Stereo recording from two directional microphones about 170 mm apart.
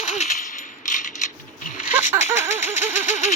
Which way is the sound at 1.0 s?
45° left (ahead or behind).